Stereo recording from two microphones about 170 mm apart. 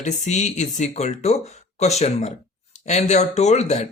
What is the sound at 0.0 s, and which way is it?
Speech, 45° left (ahead or behind).